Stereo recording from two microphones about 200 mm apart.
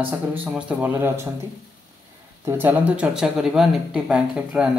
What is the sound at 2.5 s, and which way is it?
A man's voice, 10° right (ahead or behind).